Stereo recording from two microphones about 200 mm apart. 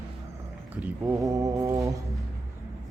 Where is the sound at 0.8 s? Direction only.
10° right (ahead or behind).